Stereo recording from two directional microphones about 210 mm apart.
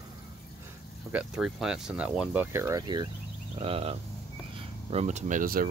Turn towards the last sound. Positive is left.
turn(degrees=-40)  # may be behind; listen again after turning